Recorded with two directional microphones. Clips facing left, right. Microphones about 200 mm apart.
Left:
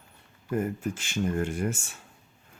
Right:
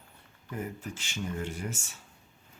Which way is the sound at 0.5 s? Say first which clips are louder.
Left 9 dB; 50° left (ahead or behind).